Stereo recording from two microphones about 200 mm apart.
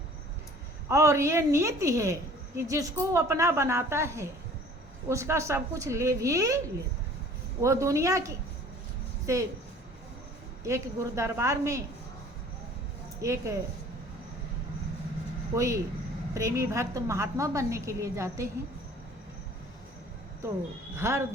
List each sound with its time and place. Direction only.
0.9 s a woman's voice: 15° right (ahead or behind)
7.6 s a woman's voice: 15° right (ahead or behind)
10.6 s a woman's voice: 15° right (ahead or behind)
13.2 s a woman's voice: 15° right (ahead or behind)
15.5 s a woman's voice: 15° right (ahead or behind)
20.9 s a woman's voice: 15° right (ahead or behind)